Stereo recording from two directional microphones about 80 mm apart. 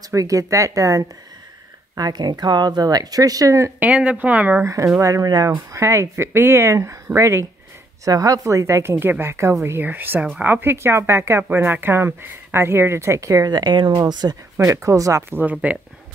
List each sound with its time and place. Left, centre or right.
0.1 s speech: right
2.0 s speech: right
3.8 s speech: centre
4.6 s speech: right
5.8 s speech: right
8.0 s speech: right
13.5 s speech: right
14.6 s speech: right
15.2 s speech: right